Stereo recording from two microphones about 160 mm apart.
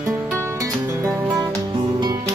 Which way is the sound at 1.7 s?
30° right (ahead or behind).